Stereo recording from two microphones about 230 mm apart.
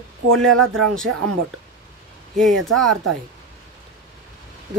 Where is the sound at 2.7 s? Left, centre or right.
Right.